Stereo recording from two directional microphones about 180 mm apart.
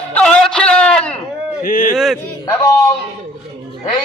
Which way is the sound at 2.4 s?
15° left (ahead or behind).